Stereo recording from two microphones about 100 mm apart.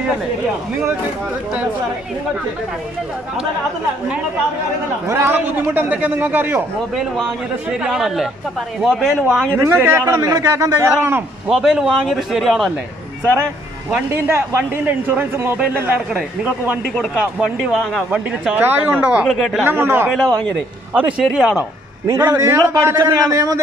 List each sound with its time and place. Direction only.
5.0 s a man's voice: 25° right (ahead or behind)
7.7 s a man's voice: 5° right (ahead or behind)
9.6 s a man's voice: 25° right (ahead or behind)
11.4 s speech: 5° right (ahead or behind)
13.8 s a man's voice: 15° right (ahead or behind)
17.2 s speech: 5° right (ahead or behind)
18.1 s a man's voice: 15° right (ahead or behind)
19.2 s speech: 5° left (ahead or behind)
19.6 s a man's voice: 25° right (ahead or behind)
20.1 s a man's voice: 10° left (ahead or behind)
21.2 s speech: 5° right (ahead or behind)
22.0 s a man's voice: 35° right (ahead or behind)